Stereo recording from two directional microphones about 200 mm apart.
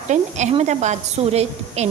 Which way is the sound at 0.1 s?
35° right (ahead or behind).